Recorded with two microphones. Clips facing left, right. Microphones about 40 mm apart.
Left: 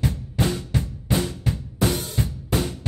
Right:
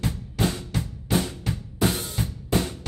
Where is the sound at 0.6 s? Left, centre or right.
Centre.